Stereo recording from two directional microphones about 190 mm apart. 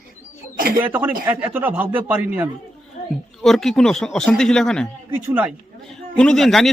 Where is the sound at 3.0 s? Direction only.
45° left (ahead or behind).